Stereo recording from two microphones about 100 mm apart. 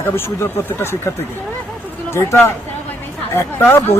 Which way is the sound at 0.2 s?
25° left (ahead or behind).